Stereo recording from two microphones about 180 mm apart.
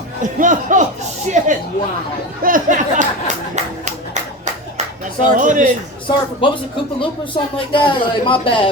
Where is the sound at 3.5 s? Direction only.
40° right (ahead or behind).